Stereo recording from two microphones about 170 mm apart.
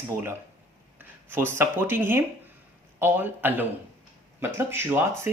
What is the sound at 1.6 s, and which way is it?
Speech, 10° right (ahead or behind).